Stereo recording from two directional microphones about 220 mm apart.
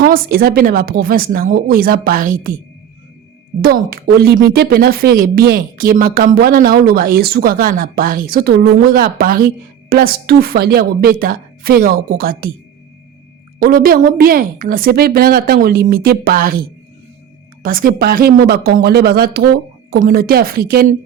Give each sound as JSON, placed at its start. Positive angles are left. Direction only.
{"t": 0.0, "sound": "speech", "side_deg": -45}
{"t": 3.6, "sound": "speech", "side_deg": -45}
{"t": 13.6, "sound": "speech", "side_deg": -40}